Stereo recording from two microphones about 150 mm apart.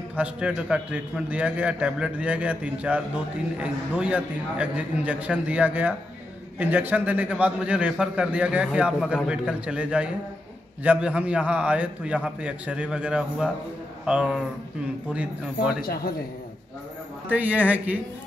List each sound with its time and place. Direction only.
0.1 s a man's voice: 10° right (ahead or behind)
15.8 s speech: 90° left
17.3 s a man's voice: 10° right (ahead or behind)